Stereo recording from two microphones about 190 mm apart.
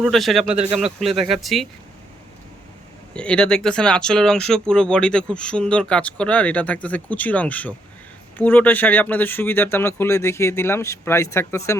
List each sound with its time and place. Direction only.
0.0 s speech: centre (ahead or behind)
0.5 s speech: 35° right (ahead or behind)
0.9 s speech: centre (ahead or behind)
3.2 s speech: 5° left (ahead or behind)